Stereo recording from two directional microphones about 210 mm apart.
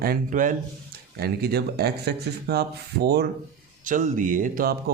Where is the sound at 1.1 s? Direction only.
50° right (ahead or behind).